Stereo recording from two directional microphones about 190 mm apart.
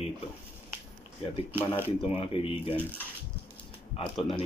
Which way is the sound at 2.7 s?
10° right (ahead or behind).